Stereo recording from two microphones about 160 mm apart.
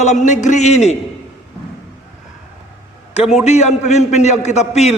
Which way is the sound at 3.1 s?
40° left (ahead or behind).